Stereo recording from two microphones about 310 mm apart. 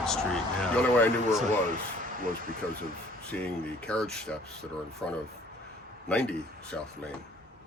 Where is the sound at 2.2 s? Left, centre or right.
Right.